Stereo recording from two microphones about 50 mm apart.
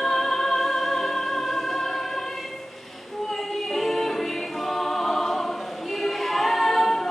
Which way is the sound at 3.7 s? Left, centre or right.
Centre.